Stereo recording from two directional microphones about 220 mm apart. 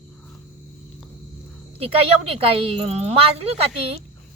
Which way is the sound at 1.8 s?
25° right (ahead or behind).